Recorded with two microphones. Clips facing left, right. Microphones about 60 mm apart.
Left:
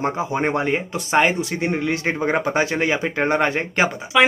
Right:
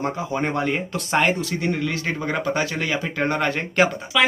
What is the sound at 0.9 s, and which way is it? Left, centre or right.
Speech, centre.